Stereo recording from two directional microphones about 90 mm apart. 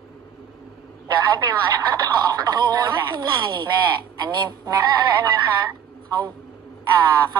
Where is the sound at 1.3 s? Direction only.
50° right (ahead or behind).